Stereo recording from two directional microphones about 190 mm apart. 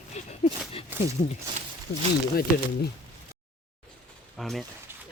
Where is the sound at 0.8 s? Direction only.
30° left (ahead or behind).